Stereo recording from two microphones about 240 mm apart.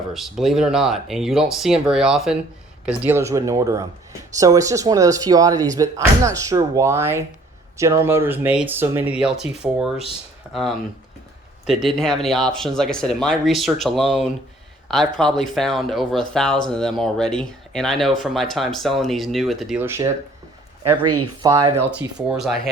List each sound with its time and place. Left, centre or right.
0.1 s speech: centre
20.9 s speech: right
21.4 s speech: centre